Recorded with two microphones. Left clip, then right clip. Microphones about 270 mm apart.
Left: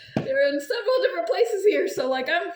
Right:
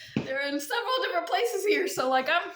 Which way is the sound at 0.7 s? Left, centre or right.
Centre.